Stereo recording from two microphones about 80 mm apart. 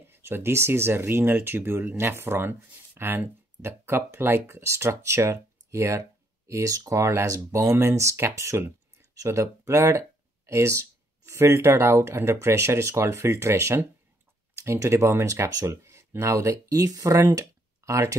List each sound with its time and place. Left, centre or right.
0.1 s speech: right